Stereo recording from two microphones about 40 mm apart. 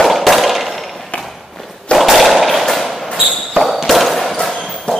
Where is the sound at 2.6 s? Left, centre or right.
Centre.